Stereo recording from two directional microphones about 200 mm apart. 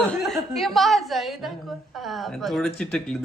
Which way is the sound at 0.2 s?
Centre (ahead or behind).